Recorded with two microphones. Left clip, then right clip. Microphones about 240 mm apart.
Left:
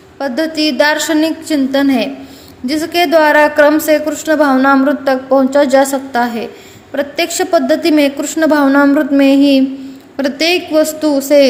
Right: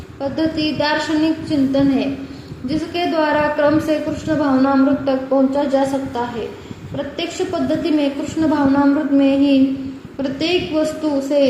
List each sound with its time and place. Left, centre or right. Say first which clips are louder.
0.2 s a woman's voice: left 5 dB; left